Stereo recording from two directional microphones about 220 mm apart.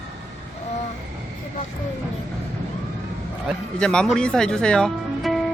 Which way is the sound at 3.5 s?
5° left (ahead or behind).